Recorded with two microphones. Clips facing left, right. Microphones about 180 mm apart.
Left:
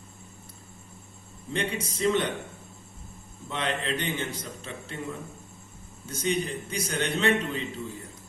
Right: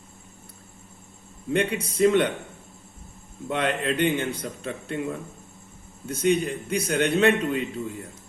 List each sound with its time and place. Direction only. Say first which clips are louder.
1.5 s speech: right 7 dB; 60° right (ahead or behind)
3.5 s speech: right 5 dB; 55° right (ahead or behind)